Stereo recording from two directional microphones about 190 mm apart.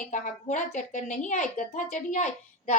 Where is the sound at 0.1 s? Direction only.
40° left (ahead or behind).